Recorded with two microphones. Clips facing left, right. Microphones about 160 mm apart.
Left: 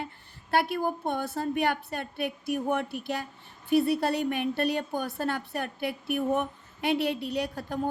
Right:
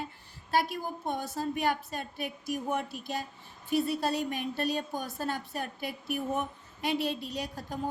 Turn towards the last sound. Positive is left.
turn(degrees=65)  # may be behind; listen again after turning